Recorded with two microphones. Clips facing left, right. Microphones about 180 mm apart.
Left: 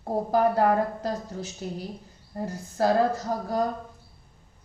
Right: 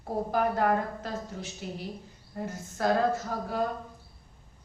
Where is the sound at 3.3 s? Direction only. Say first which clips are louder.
Left 4 dB; 40° left (ahead or behind).